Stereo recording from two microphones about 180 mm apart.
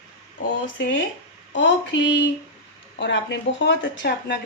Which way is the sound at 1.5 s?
90° left.